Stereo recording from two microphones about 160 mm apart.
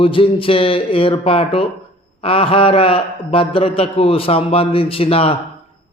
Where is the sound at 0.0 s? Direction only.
35° left (ahead or behind).